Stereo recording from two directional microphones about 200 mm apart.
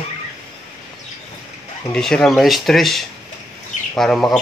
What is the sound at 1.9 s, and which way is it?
A man's voice, centre (ahead or behind).